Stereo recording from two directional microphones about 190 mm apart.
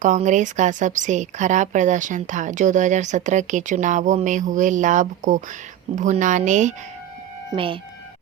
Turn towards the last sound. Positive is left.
turn(degrees=-25)  # may be behind; listen again after turning